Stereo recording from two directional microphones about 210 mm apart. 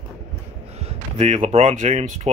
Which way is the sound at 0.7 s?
30° right (ahead or behind).